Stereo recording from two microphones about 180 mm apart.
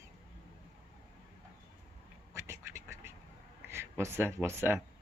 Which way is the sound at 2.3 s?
15° right (ahead or behind).